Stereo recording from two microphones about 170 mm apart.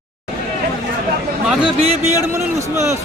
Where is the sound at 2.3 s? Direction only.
15° right (ahead or behind).